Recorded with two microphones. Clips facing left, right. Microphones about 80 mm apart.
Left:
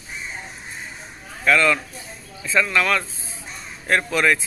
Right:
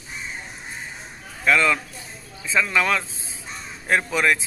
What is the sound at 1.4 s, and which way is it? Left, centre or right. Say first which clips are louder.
Speech: left 1 dB; centre.